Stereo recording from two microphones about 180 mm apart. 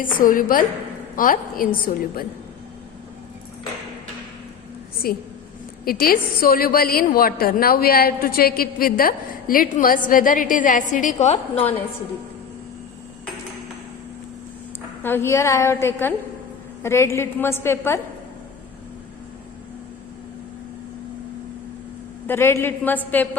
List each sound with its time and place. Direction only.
0.0 s a woman's voice: 50° left (ahead or behind)
5.0 s a woman's voice: 55° left (ahead or behind); by 11.6 s 35° left (ahead or behind)
15.0 s a woman's voice: 10° left (ahead or behind)
22.3 s a woman's voice: 15° left (ahead or behind)